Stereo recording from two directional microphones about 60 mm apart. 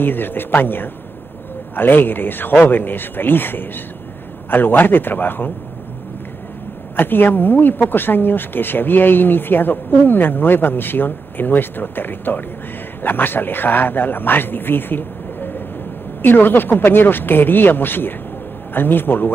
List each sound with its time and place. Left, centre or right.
0.0 s speech: left
7.0 s speech: left